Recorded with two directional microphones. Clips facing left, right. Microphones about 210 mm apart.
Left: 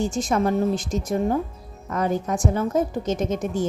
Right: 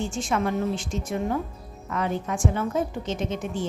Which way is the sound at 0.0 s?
40° left (ahead or behind).